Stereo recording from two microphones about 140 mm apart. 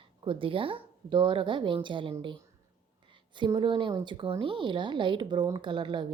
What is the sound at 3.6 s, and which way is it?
A woman's voice, 35° right (ahead or behind).